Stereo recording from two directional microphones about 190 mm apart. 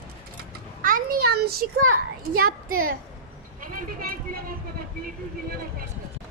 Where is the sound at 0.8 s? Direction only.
50° right (ahead or behind).